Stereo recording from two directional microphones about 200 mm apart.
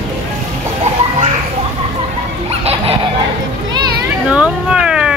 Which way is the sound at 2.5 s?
30° right (ahead or behind).